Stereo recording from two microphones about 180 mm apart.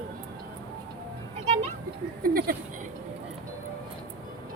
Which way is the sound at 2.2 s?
55° right (ahead or behind).